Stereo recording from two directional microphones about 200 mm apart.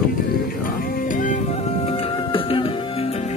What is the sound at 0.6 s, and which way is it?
Music, 45° left (ahead or behind).